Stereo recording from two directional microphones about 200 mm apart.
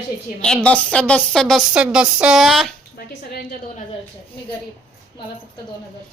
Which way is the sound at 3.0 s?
50° left (ahead or behind).